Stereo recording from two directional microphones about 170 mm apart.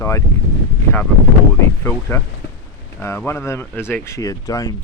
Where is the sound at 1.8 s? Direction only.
15° left (ahead or behind).